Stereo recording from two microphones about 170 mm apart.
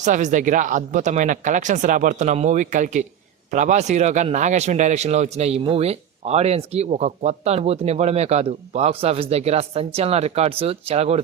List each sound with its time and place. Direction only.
0.0 s speech: 45° right (ahead or behind)